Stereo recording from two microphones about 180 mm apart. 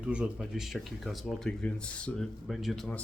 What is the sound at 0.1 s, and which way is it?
Speech, 5° right (ahead or behind).